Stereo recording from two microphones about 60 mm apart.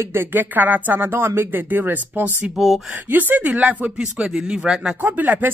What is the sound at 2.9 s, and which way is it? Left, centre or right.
Speech, right.